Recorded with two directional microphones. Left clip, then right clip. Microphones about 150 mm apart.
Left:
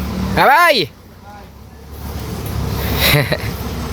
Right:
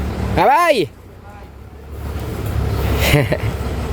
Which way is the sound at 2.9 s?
20° right (ahead or behind).